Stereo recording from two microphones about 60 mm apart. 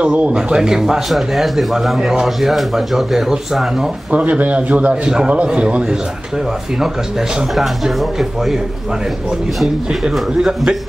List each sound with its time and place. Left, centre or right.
0.0 s speech: centre
4.1 s a man's voice: right
6.8 s speech: centre
10.3 s speech: centre